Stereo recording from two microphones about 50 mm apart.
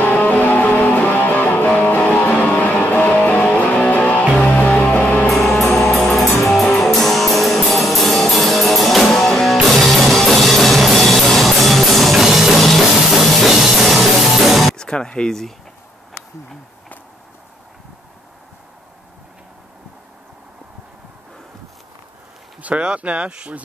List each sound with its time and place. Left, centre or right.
0.0 s music: left
5.3 s music: centre
14.8 s music: centre
22.6 s a sound: right
22.8 s speech: right